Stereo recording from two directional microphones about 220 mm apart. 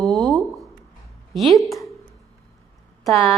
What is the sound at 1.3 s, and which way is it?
Speech, centre (ahead or behind).